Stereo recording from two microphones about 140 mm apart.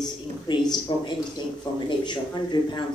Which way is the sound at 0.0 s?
30° left (ahead or behind).